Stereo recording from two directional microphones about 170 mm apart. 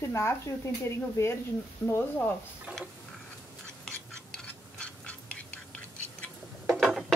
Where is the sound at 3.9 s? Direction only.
5° left (ahead or behind).